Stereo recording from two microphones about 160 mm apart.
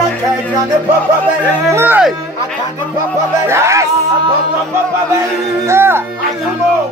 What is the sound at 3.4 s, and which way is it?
Speech, 15° right (ahead or behind).